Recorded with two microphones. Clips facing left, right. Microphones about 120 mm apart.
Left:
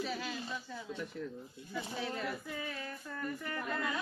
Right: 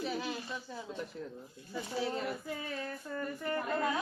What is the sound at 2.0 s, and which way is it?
A woman's voice, 30° right (ahead or behind).